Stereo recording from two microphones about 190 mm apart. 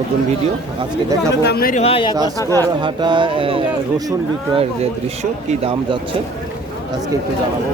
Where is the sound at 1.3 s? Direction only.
60° left (ahead or behind).